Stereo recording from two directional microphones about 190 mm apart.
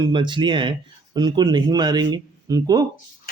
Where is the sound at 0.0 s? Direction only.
25° right (ahead or behind).